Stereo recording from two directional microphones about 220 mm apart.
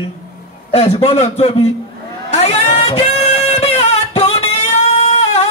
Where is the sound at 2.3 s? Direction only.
30° left (ahead or behind).